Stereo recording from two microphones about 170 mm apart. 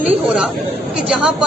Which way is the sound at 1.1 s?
5° right (ahead or behind).